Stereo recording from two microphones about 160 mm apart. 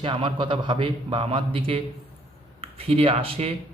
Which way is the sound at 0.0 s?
35° right (ahead or behind).